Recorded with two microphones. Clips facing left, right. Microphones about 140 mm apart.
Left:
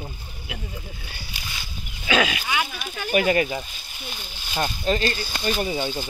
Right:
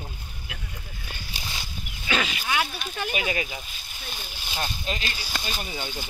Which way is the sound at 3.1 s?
45° left (ahead or behind).